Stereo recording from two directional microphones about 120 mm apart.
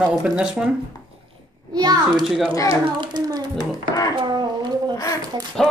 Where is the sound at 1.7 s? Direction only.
35° right (ahead or behind).